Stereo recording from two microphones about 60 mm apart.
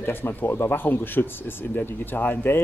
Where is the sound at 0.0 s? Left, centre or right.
Left.